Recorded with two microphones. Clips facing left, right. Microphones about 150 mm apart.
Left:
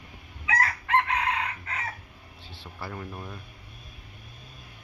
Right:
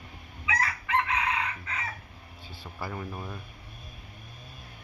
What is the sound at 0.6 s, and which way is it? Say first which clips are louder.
Crowing: left 3 dB; 50° left (ahead or behind).